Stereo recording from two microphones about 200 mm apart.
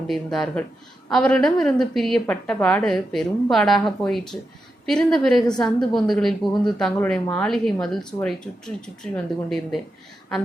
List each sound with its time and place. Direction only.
0.1 s a woman's voice: centre (ahead or behind)